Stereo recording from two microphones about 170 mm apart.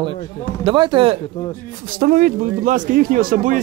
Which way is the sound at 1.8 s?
55° right (ahead or behind).